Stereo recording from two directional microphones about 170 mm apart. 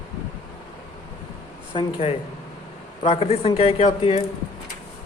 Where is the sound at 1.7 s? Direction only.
35° left (ahead or behind).